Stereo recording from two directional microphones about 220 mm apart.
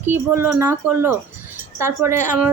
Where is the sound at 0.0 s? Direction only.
10° right (ahead or behind).